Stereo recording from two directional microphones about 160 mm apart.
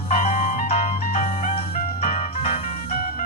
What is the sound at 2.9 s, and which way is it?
Music, 60° left (ahead or behind).